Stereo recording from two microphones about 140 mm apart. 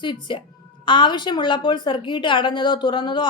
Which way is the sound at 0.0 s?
35° left (ahead or behind).